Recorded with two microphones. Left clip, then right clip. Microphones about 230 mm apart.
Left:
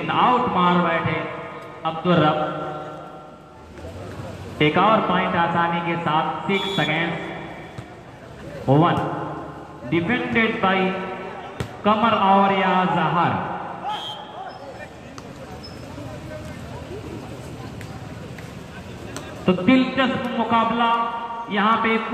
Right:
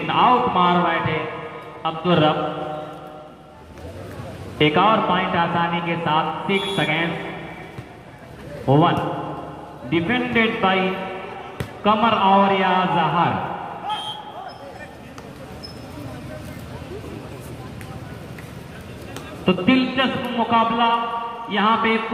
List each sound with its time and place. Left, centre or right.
0.0 s a sound: right
4.6 s a man's voice: right
8.6 s a man's voice: right
11.8 s a man's voice: right
19.4 s a man's voice: right